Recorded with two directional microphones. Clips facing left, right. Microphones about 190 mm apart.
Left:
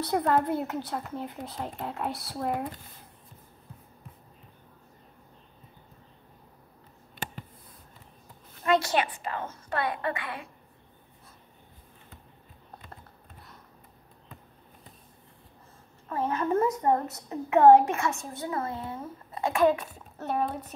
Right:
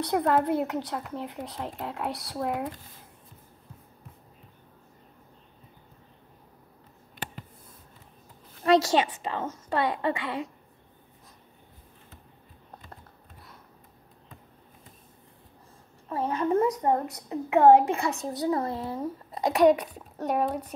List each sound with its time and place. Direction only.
0.0 s speech: centre (ahead or behind)
8.6 s a woman's voice: 25° right (ahead or behind)
16.1 s a child's voice: 15° right (ahead or behind)
18.1 s speech: 35° right (ahead or behind)
19.8 s a child's voice: 15° right (ahead or behind)